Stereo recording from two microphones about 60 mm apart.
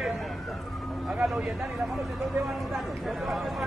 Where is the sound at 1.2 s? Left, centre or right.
Centre.